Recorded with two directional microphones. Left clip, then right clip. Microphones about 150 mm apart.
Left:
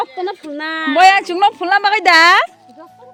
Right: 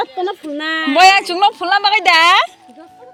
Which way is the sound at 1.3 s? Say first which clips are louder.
Even; 45° left (ahead or behind).